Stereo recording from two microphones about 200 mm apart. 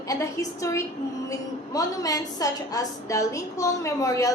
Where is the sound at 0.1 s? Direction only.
15° left (ahead or behind).